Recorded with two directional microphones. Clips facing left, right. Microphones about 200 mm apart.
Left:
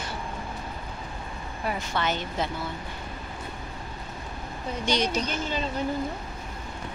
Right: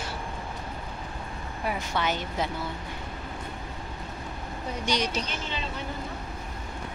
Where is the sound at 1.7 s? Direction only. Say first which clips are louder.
Even; 10° right (ahead or behind).